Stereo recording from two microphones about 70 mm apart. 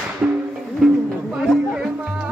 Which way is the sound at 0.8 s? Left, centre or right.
Centre.